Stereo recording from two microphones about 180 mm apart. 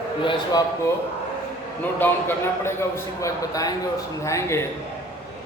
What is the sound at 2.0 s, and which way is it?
A man's voice, 15° left (ahead or behind).